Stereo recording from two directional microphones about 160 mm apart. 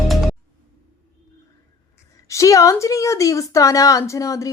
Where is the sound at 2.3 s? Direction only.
20° left (ahead or behind).